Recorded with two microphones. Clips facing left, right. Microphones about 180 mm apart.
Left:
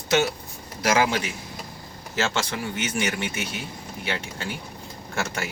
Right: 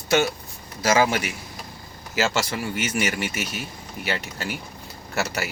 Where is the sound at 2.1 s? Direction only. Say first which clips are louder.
Right 2 dB; 5° right (ahead or behind).